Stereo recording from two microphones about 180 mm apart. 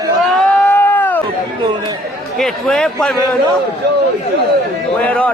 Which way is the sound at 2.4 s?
Centre (ahead or behind).